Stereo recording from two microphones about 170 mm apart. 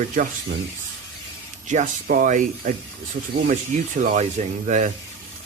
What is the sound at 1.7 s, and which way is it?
Speech, 50° right (ahead or behind).